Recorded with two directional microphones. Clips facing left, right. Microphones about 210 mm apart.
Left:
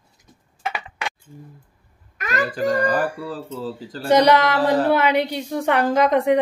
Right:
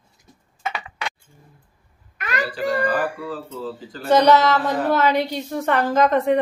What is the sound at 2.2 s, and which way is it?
A child's voice, 45° left (ahead or behind).